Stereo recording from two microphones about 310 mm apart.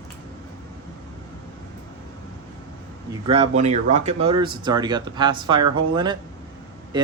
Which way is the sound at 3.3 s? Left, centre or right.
Right.